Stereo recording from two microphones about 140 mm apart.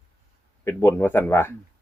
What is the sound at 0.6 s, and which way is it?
Speech, 15° left (ahead or behind).